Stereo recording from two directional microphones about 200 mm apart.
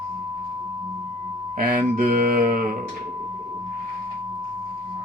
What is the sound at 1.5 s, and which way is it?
Speech, 45° right (ahead or behind).